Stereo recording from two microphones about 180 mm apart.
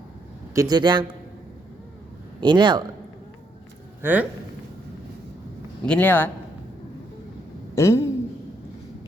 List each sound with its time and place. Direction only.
0.5 s speech: 20° right (ahead or behind)
2.4 s speech: 25° right (ahead or behind)
4.0 s speech: 10° right (ahead or behind)
5.8 s a man's voice: 10° left (ahead or behind)
7.8 s a man's voice: 15° left (ahead or behind)